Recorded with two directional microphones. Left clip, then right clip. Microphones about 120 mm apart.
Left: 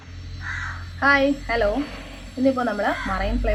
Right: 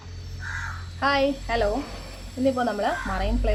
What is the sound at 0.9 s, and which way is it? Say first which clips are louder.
Speech: left 4 dB; 15° right (ahead or behind).